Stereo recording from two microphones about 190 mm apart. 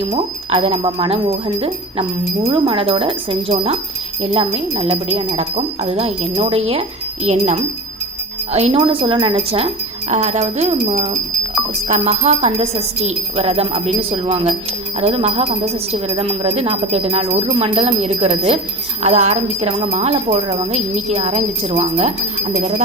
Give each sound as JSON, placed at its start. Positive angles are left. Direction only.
{"t": 0.1, "sound": "speech", "side_deg": -30}